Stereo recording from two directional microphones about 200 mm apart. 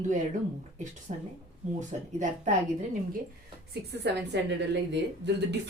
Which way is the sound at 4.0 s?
60° right (ahead or behind).